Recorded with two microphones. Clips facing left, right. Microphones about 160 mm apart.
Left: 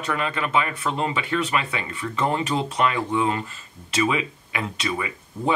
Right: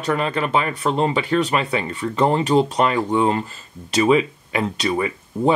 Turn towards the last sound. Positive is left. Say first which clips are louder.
# right 8 dB
turn(degrees=-35)  # may be behind; listen again after turning